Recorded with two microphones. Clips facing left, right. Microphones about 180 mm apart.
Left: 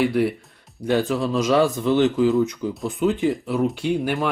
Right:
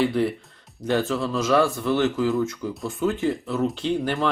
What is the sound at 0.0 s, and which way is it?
Speech, 10° left (ahead or behind).